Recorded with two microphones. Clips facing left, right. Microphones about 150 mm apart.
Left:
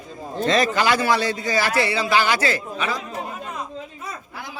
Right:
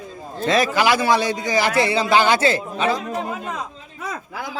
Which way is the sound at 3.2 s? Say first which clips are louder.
Right 4 dB; 90° right.